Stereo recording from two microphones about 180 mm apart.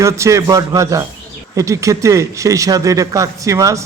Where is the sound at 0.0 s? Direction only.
15° right (ahead or behind).